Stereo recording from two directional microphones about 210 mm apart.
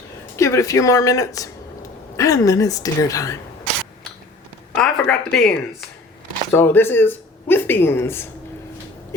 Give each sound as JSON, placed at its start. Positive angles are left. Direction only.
{"t": 0.3, "sound": "speech", "side_deg": 15}
{"t": 4.8, "sound": "speech", "side_deg": 5}